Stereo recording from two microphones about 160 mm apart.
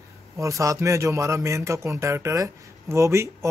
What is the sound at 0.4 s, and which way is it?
A man's voice, 20° right (ahead or behind).